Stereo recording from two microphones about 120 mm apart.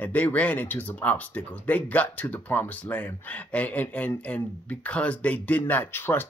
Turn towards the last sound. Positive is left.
turn(degrees=15)  # may be behind; listen again after turning